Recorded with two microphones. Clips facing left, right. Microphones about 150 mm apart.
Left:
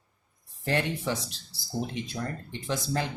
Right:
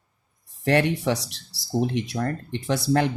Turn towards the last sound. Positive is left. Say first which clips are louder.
# right 8 dB
turn(degrees=-65)  # may be behind; listen again after turning